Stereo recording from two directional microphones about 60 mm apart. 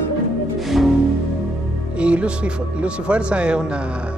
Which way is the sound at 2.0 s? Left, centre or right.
Centre.